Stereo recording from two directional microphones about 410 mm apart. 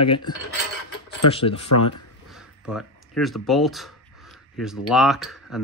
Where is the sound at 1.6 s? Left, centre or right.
Left.